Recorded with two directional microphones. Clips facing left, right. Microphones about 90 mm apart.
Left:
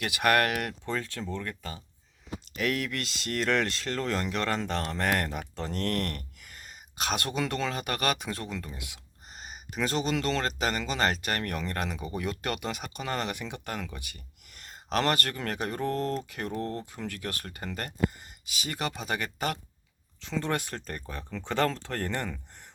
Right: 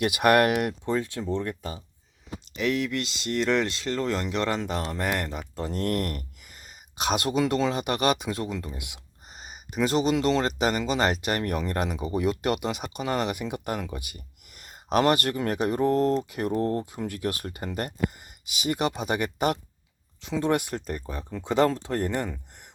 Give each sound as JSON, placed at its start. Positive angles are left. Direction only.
{"t": 0.0, "sound": "speech", "side_deg": -15}
{"t": 2.6, "sound": "speech", "side_deg": 0}
{"t": 5.6, "sound": "a sound", "side_deg": -15}
{"t": 7.0, "sound": "speech", "side_deg": -10}
{"t": 9.3, "sound": "speech", "side_deg": -5}
{"t": 16.8, "sound": "speech", "side_deg": -10}